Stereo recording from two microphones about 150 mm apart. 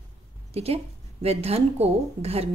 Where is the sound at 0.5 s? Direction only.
40° right (ahead or behind).